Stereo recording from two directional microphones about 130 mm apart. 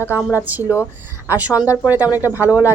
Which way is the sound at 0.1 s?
15° right (ahead or behind).